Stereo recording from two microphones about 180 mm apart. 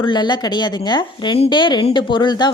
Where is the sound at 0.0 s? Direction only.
25° left (ahead or behind).